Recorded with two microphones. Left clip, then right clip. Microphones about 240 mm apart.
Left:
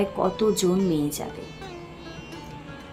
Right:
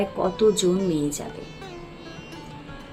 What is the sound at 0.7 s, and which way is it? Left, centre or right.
Speech, centre.